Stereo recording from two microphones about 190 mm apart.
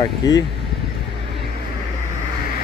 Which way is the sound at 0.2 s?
20° left (ahead or behind).